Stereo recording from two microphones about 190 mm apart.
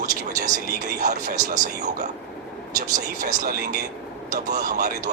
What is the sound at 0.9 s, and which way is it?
Speech, 45° right (ahead or behind).